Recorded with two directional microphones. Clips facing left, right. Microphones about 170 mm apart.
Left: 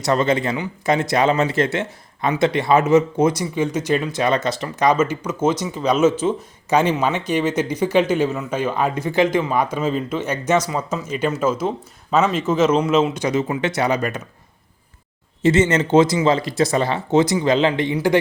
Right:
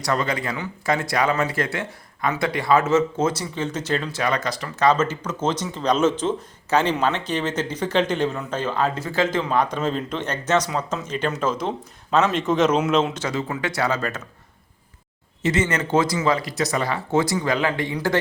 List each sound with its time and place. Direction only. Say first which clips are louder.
0.0 s speech: left 6 dB; 25° left (ahead or behind); by 13.2 s 5° left (ahead or behind)
13.2 s speech: left 5 dB; 20° left (ahead or behind)
15.4 s speech: left 6 dB; 25° left (ahead or behind)